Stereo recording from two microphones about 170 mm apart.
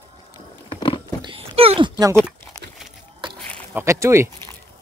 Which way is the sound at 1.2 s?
35° right (ahead or behind).